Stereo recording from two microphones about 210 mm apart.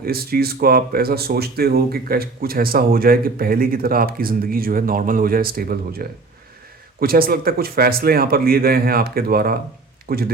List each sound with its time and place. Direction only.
0.0 s speech: 45° right (ahead or behind)